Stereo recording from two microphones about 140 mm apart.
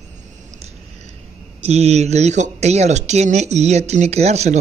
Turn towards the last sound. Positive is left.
turn(degrees=-50)  # may be behind; listen again after turning